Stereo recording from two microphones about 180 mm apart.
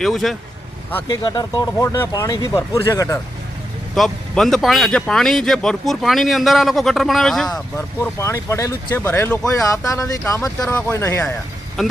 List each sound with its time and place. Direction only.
0.0 s speech: centre (ahead or behind)
1.0 s speech: 25° left (ahead or behind)
3.9 s speech: centre (ahead or behind)
8.2 s speech: 15° left (ahead or behind)
11.8 s speech: centre (ahead or behind)